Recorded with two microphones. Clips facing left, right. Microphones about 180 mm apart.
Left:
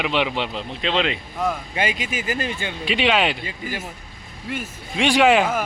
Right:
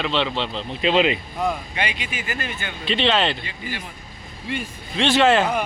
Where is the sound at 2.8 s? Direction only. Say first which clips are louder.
Even; 10° left (ahead or behind).